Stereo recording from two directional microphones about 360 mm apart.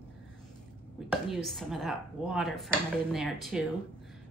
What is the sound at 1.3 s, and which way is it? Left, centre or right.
Speech, centre.